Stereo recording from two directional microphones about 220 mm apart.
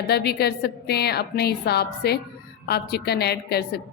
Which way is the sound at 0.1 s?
45° left (ahead or behind).